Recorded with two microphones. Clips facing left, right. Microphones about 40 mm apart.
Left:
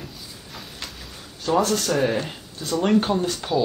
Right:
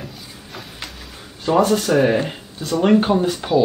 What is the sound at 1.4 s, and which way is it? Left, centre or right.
Speech, centre.